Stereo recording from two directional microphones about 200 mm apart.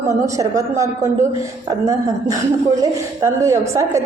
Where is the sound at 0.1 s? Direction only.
15° right (ahead or behind).